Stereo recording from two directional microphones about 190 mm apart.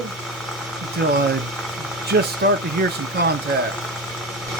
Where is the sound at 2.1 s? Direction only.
60° right (ahead or behind).